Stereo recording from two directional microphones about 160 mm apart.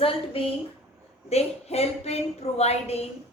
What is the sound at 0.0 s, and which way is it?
A woman's voice, 35° left (ahead or behind).